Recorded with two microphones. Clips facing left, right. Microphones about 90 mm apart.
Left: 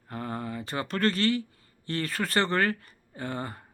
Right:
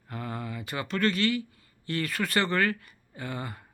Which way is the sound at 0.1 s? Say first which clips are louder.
Left 2 dB; 35° left (ahead or behind).